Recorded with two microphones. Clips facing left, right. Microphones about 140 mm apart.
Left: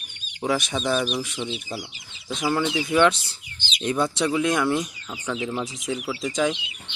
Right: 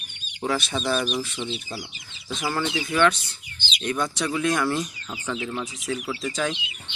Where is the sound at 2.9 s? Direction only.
20° left (ahead or behind).